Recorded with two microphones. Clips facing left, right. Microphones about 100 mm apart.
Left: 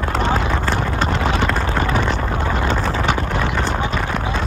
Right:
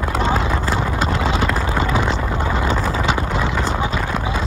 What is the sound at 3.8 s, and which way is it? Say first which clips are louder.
Clip-clop: even; 10° right (ahead or behind).